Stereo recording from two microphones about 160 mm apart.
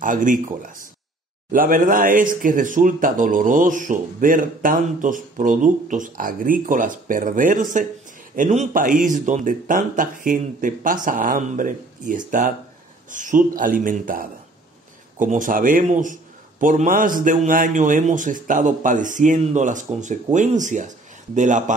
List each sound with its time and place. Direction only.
0.0 s speech: 55° right (ahead or behind)
1.5 s a man's voice: 60° right (ahead or behind)